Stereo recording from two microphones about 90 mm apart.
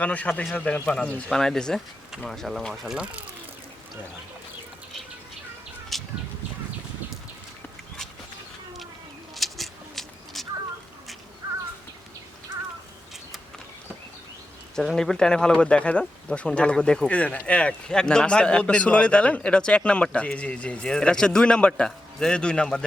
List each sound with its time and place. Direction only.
0.0 s speech: 15° left (ahead or behind); by 3.2 s 10° right (ahead or behind)
5.9 s bird: centre (ahead or behind)
9.3 s a sound: centre (ahead or behind)
14.8 s speech: 5° left (ahead or behind)